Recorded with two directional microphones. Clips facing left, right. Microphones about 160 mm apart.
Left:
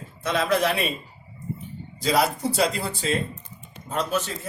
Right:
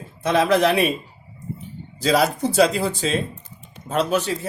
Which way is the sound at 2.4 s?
75° right (ahead or behind).